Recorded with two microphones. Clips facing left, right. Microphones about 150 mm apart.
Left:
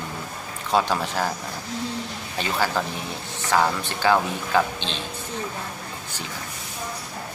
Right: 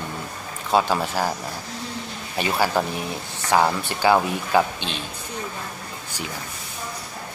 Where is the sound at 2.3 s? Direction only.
10° right (ahead or behind).